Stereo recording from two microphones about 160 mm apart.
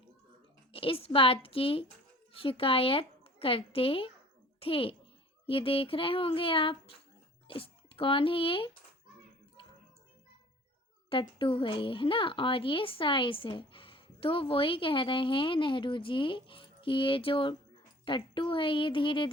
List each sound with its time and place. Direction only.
0.7 s speech: 35° left (ahead or behind)
11.1 s speech: 30° left (ahead or behind)